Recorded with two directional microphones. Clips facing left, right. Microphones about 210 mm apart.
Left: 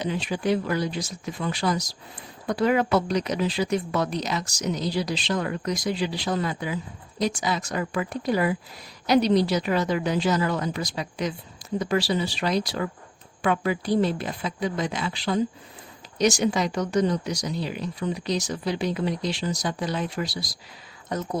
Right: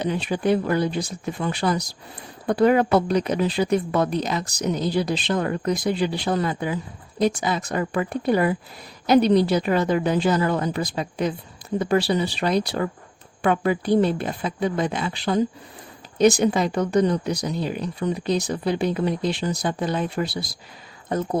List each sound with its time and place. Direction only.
0.0 s speech: 55° right (ahead or behind)
21.1 s speech: 30° right (ahead or behind)